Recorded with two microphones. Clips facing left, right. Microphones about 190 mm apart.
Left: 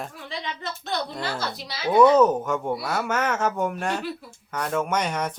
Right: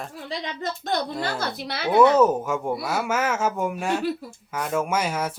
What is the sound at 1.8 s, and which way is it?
Speech, 10° right (ahead or behind).